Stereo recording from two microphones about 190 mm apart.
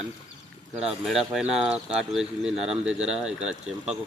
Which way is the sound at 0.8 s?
Centre (ahead or behind).